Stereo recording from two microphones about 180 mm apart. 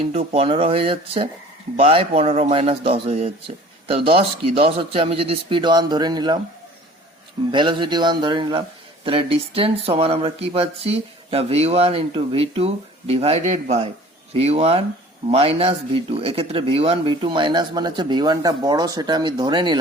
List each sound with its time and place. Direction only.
0.3 s speech: 30° right (ahead or behind)
7.5 s speech: 25° right (ahead or behind)